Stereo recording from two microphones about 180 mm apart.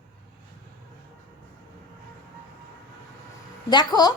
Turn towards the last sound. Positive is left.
turn(degrees=20)  # may be behind; listen again after turning